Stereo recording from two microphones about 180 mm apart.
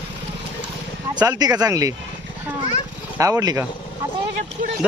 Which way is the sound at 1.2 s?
20° right (ahead or behind).